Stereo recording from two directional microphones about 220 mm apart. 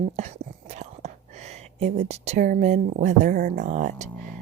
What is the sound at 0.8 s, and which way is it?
Speech, 30° right (ahead or behind).